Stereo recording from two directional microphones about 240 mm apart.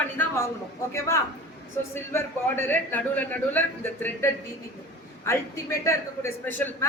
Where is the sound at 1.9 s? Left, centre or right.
Centre.